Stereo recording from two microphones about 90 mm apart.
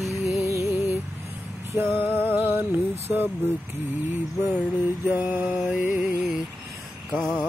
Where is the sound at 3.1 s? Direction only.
15° right (ahead or behind).